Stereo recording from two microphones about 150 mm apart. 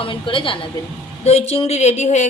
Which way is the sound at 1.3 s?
45° left (ahead or behind).